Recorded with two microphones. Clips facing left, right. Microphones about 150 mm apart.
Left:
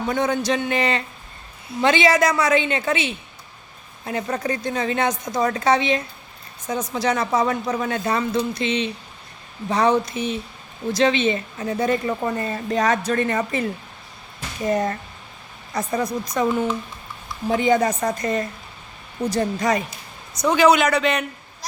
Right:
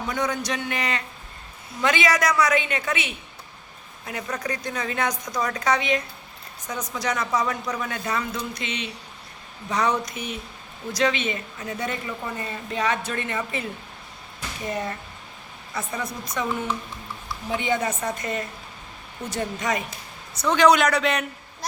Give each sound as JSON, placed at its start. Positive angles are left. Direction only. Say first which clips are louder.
{"t": 0.2, "sound": "a woman's voice", "louder": "left 5 dB", "side_deg": 25}
{"t": 14.7, "sound": "a woman's voice", "louder": "left 8 dB", "side_deg": 45}
{"t": 20.3, "sound": "a man's voice", "louder": "left 2 dB", "side_deg": 15}